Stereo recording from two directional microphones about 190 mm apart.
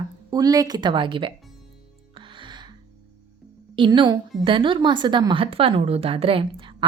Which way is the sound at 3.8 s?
25° right (ahead or behind).